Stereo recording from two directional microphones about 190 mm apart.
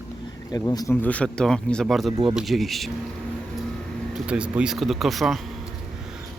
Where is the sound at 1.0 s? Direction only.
5° left (ahead or behind).